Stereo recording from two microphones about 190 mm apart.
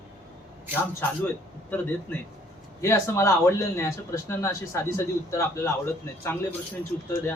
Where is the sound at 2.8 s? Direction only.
15° left (ahead or behind).